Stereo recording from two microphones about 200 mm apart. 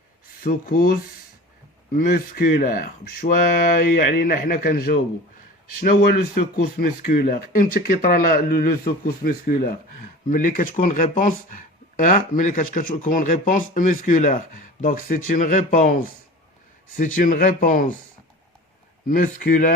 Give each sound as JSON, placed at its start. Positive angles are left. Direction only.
{"t": 0.4, "sound": "speech", "side_deg": 45}
{"t": 2.0, "sound": "speech", "side_deg": 45}
{"t": 17.2, "sound": "speech", "side_deg": 40}
{"t": 19.0, "sound": "speech", "side_deg": 45}